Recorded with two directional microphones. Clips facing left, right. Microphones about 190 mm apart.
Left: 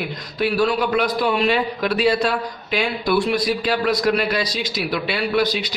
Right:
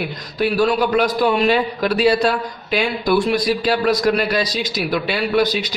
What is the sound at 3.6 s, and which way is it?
A man's voice, 40° right (ahead or behind).